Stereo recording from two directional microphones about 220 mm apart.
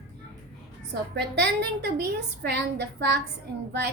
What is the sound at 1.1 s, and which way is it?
A woman's voice, 50° right (ahead or behind).